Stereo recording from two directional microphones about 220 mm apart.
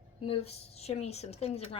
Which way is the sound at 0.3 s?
25° left (ahead or behind).